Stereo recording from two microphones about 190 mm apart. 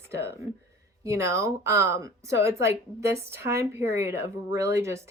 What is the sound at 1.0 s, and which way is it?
Speech, 15° right (ahead or behind).